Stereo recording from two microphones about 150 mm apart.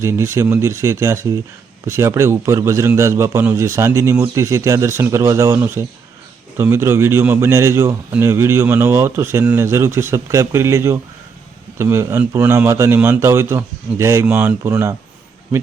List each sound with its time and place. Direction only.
0.0 s a man's voice: 20° right (ahead or behind)